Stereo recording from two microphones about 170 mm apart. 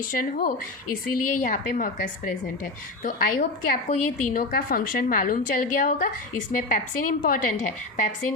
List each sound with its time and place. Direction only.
0.1 s a woman's voice: 55° left (ahead or behind)
3.8 s a woman's voice: 45° left (ahead or behind)